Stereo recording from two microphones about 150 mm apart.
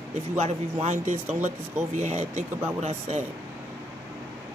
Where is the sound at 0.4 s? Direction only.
50° right (ahead or behind).